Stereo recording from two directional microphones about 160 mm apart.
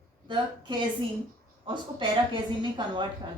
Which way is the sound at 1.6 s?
30° right (ahead or behind).